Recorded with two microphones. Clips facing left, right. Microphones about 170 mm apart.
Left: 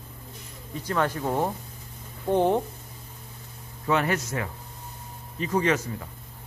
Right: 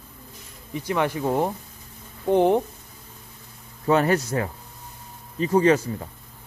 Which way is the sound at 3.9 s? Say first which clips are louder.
Right 5 dB; 35° right (ahead or behind).